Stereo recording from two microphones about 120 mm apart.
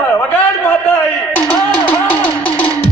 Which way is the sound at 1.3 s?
15° left (ahead or behind).